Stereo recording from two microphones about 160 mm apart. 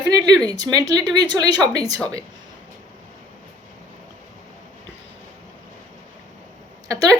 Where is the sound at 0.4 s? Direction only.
25° right (ahead or behind).